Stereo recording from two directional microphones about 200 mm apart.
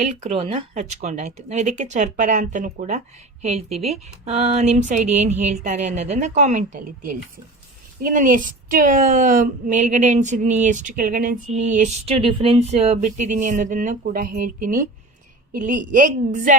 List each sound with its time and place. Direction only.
0.0 s speech: 35° right (ahead or behind)